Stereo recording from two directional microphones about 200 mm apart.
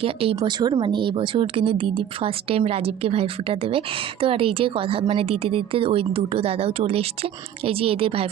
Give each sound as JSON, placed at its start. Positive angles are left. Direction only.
{"t": 0.0, "sound": "speech", "side_deg": -30}